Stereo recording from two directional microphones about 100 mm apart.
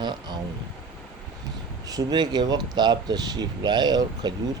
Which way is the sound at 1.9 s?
45° right (ahead or behind).